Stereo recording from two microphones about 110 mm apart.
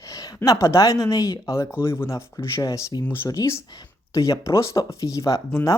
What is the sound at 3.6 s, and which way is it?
Speech, 45° left (ahead or behind).